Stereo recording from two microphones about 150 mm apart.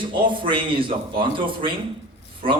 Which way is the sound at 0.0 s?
35° right (ahead or behind).